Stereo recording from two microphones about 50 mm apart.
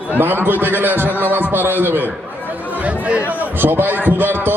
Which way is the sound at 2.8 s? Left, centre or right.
Right.